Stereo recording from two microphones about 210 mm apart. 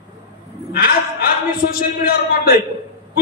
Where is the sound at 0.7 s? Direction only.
45° left (ahead or behind).